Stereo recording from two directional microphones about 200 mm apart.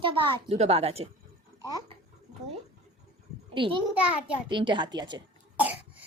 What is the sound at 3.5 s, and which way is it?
Speech, 25° right (ahead or behind).